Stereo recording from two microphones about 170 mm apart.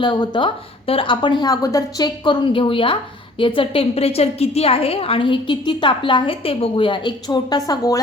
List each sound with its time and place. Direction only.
0.0 s a woman's voice: 25° left (ahead or behind)